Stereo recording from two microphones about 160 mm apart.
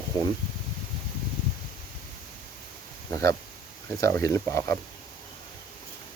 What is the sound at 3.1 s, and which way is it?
Speech, 20° left (ahead or behind).